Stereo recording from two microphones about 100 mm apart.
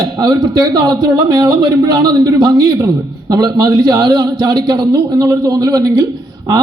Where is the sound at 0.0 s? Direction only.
40° right (ahead or behind).